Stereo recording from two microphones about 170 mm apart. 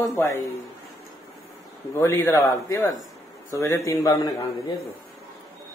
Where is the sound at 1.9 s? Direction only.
15° left (ahead or behind).